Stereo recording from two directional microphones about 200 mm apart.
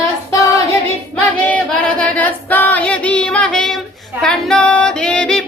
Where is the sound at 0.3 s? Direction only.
15° left (ahead or behind).